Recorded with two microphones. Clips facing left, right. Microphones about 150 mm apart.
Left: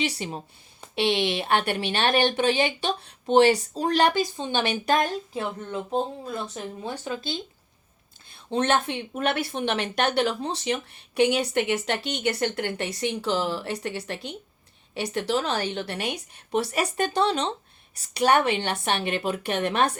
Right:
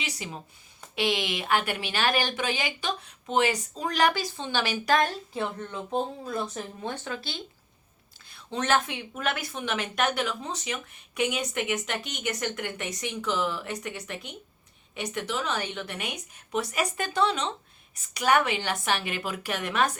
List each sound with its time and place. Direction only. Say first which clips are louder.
0.0 s a woman's voice: left 8 dB; 30° left (ahead or behind)